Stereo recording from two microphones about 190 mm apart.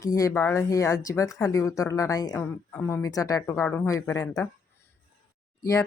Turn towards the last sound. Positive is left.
turn(degrees=15)  # may be behind; listen again after turning